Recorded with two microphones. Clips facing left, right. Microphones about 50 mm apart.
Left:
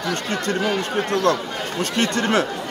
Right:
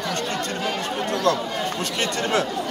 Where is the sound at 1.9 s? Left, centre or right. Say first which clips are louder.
Left 4 dB; left.